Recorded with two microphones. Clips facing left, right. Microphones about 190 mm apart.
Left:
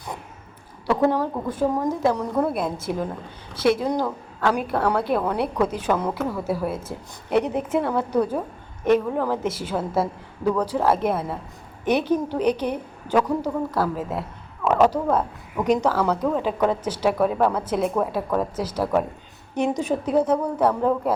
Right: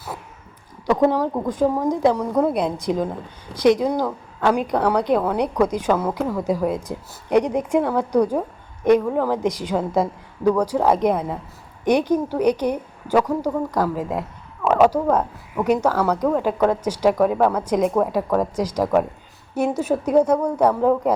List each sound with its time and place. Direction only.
0.9 s a woman's voice: 15° right (ahead or behind)